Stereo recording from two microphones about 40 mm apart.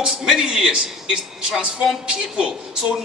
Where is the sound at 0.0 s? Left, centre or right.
Centre.